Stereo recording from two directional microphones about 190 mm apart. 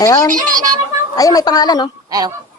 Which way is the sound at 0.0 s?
20° left (ahead or behind).